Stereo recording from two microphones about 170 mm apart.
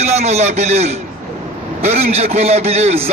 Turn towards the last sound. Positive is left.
turn(degrees=-40)  # may be behind; listen again after turning